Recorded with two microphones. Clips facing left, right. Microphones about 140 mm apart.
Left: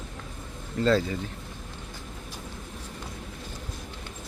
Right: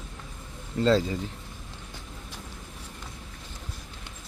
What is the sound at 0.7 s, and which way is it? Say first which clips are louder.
Speech: right 1 dB; 30° right (ahead or behind).